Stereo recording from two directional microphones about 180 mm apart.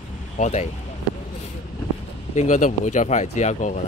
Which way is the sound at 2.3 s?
40° left (ahead or behind).